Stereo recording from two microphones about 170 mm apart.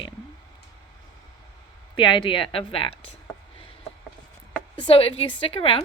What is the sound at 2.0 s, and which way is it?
Speech, 30° left (ahead or behind).